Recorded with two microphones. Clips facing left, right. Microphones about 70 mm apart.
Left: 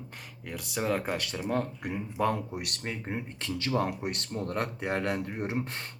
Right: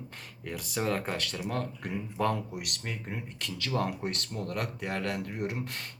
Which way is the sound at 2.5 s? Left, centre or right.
Left.